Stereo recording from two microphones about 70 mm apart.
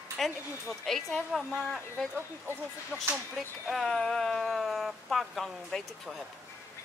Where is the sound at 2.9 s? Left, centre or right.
Centre.